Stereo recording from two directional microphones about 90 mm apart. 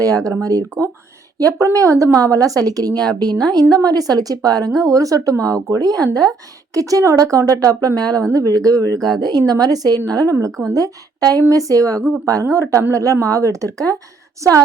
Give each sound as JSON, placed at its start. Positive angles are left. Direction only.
{"t": 0.0, "sound": "a woman's voice", "side_deg": -40}